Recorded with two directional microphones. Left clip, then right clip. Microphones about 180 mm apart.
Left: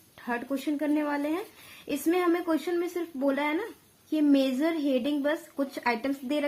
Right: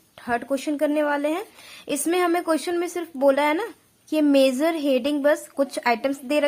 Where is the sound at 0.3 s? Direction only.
35° right (ahead or behind).